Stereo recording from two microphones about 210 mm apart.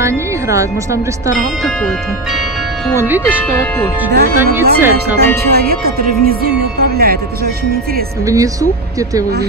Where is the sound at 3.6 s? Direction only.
10° left (ahead or behind).